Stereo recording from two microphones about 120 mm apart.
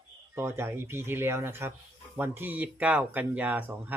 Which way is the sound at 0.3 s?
20° right (ahead or behind).